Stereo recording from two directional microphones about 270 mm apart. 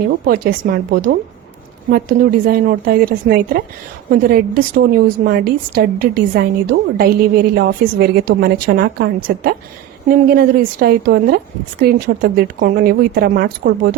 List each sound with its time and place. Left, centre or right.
0.3 s a woman's voice: right